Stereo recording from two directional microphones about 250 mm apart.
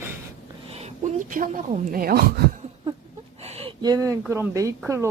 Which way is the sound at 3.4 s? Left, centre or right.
Right.